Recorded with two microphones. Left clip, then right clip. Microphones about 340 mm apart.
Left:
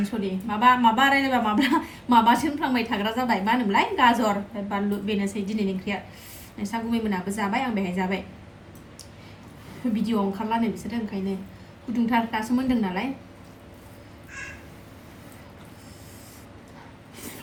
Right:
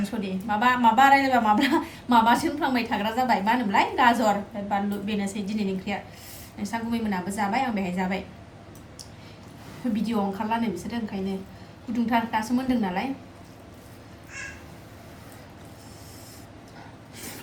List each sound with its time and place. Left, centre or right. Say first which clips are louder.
0.0 s a woman's voice: left 2 dB; centre
9.9 s a woman's voice: left 1 dB; centre